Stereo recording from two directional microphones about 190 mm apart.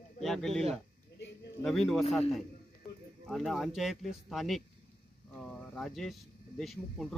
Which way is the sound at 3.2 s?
Centre (ahead or behind).